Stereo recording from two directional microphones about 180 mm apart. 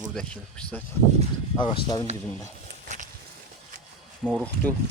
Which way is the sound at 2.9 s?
40° right (ahead or behind).